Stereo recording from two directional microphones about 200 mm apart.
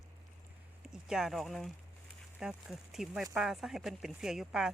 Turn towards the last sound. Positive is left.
turn(degrees=0)  # may be behind; listen again after turning